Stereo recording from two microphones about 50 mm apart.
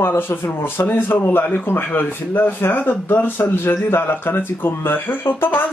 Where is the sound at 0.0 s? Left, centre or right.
Left.